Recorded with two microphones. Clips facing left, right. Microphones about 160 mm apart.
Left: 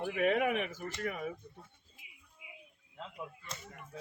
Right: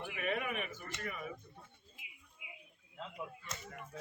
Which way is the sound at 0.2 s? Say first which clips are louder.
Left 8 dB; 85° left.